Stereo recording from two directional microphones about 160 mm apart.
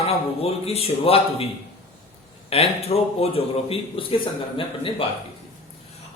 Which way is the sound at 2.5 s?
40° left (ahead or behind).